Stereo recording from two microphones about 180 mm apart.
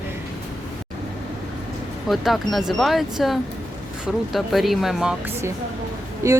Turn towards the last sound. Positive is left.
turn(degrees=-15)  # may be behind; listen again after turning